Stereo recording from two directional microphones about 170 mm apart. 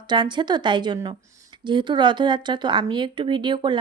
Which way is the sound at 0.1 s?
25° right (ahead or behind).